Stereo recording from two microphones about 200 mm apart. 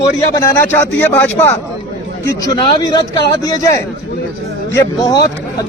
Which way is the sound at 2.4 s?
20° left (ahead or behind).